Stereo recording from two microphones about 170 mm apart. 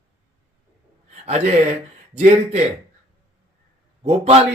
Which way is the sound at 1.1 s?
40° right (ahead or behind).